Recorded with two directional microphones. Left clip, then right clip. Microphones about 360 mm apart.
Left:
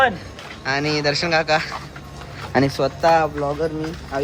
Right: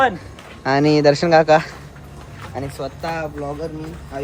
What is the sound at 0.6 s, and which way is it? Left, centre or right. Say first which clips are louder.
Speech: right 6 dB; centre.